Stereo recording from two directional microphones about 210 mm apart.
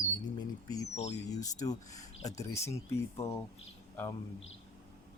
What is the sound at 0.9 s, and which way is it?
Speech, 30° left (ahead or behind).